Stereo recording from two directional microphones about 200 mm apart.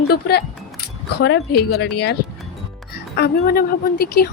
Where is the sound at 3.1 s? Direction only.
50° left (ahead or behind).